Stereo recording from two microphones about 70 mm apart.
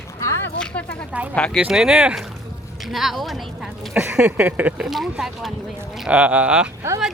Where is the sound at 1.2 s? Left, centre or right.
Right.